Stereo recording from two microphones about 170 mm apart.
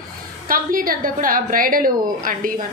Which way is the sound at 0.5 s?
55° right (ahead or behind).